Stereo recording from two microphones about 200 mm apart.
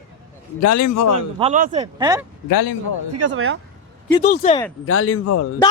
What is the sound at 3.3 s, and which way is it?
Speech, 75° right (ahead or behind).